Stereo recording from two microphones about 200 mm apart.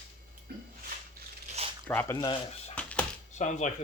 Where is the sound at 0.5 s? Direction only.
50° right (ahead or behind).